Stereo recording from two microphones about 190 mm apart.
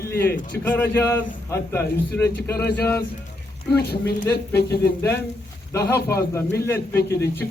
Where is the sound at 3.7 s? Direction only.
55° left (ahead or behind).